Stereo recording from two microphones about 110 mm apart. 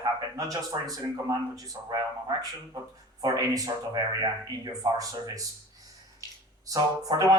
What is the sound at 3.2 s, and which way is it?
Speech, 35° right (ahead or behind).